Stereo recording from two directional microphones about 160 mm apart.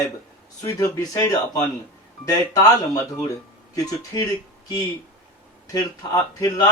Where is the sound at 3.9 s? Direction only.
20° left (ahead or behind).